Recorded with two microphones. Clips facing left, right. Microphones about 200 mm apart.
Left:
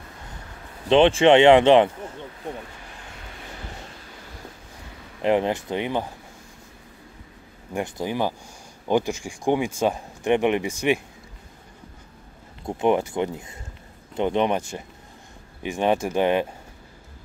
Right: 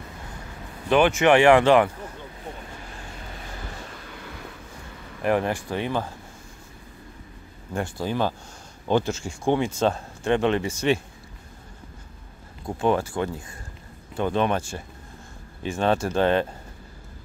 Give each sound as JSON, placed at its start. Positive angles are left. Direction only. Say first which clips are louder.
{"t": 0.8, "sound": "speech", "louder": "left 3 dB", "side_deg": 25}
{"t": 5.2, "sound": "speech", "louder": "left 2 dB", "side_deg": 20}
{"t": 7.7, "sound": "speech", "louder": "even", "side_deg": 15}
{"t": 12.6, "sound": "speech", "louder": "left 2 dB", "side_deg": 20}